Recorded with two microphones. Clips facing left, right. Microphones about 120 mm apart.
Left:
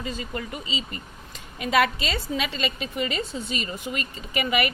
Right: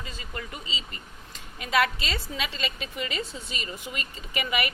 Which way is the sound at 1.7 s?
25° left (ahead or behind).